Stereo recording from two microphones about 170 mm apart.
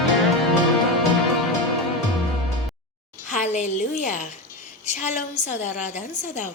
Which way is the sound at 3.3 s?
45° left (ahead or behind).